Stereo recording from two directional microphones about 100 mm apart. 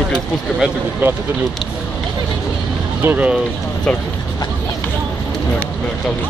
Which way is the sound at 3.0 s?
20° right (ahead or behind).